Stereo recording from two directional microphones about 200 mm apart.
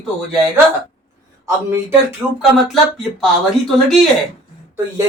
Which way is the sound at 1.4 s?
15° right (ahead or behind).